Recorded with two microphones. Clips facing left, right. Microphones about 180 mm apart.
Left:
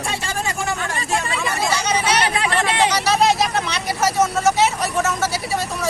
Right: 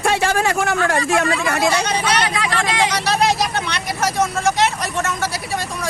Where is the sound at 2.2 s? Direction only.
30° left (ahead or behind).